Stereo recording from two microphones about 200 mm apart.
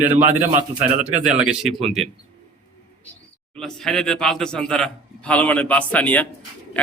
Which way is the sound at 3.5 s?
5° left (ahead or behind).